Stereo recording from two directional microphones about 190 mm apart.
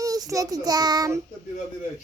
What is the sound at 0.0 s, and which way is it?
Child singing, 20° right (ahead or behind).